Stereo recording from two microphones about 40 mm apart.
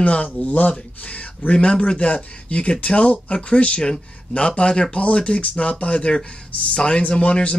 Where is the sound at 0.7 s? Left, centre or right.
Left.